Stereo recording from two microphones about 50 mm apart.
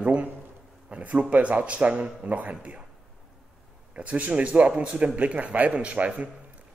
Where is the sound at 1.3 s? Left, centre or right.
Right.